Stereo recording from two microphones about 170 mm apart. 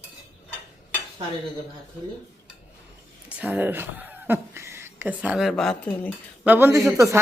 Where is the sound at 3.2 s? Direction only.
10° right (ahead or behind); by 6.1 s 10° left (ahead or behind).